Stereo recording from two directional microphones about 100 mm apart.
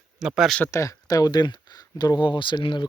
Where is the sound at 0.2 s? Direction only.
5° right (ahead or behind).